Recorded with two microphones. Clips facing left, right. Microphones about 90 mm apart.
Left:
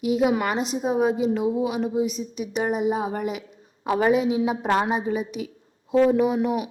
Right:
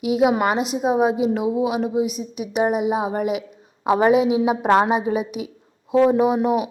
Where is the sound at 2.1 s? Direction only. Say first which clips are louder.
Right 2 dB; 30° left (ahead or behind).